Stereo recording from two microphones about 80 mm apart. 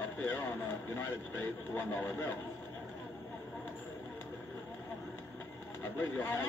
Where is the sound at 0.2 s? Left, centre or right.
Left.